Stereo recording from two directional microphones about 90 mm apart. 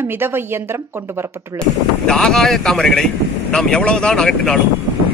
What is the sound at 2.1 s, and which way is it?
Speech, 5° left (ahead or behind).